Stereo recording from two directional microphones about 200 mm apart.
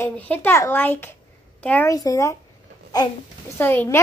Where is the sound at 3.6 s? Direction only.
10° left (ahead or behind).